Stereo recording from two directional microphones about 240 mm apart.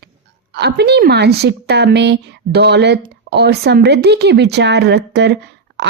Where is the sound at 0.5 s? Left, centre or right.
Right.